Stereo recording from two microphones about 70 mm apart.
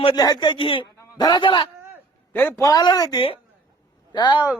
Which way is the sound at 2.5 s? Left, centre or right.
Left.